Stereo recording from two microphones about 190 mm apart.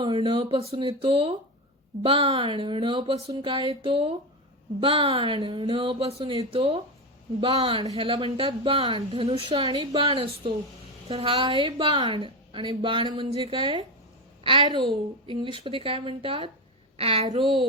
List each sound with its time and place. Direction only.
0.0 s speech: 25° right (ahead or behind)